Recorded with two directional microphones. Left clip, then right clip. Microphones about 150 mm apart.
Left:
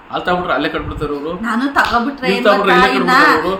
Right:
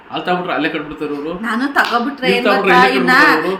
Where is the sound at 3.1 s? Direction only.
15° right (ahead or behind).